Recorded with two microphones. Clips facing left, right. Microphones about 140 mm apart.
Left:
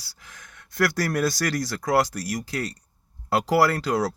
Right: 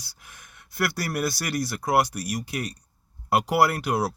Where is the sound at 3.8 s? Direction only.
90° left.